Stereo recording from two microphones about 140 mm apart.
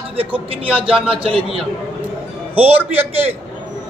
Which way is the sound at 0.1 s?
40° right (ahead or behind).